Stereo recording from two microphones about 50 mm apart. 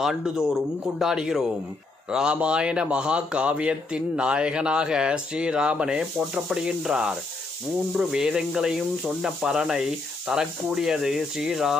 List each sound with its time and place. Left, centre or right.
0.2 s a man's voice: centre